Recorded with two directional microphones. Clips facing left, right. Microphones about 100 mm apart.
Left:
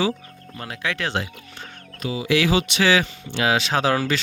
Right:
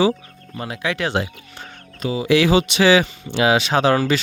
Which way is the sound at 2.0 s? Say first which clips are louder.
Right 4 dB; 35° right (ahead or behind).